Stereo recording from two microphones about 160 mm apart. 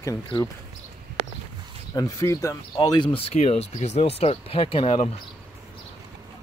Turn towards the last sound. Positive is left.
turn(degrees=35)  # may be behind; listen again after turning